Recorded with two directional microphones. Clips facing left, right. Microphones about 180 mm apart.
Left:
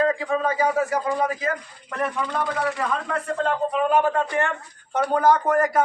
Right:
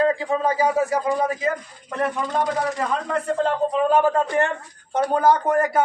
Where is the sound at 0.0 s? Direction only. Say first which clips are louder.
Right 2 dB; 30° right (ahead or behind).